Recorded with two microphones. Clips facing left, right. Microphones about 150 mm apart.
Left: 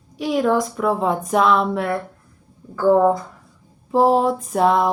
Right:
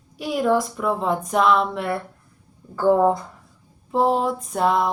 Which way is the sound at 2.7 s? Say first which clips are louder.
Left 2 dB; 20° right (ahead or behind).